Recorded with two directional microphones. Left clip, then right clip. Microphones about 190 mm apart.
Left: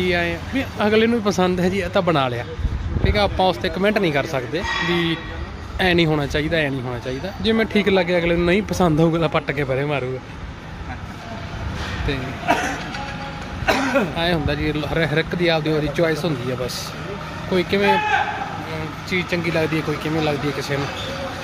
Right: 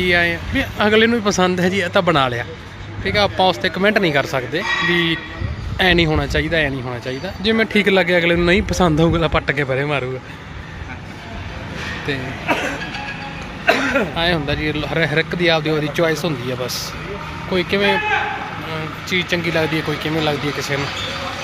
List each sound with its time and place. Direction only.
0.0 s speech: centre (ahead or behind)
13.7 s vehicle: 60° left (ahead or behind)
14.1 s speech: 5° left (ahead or behind)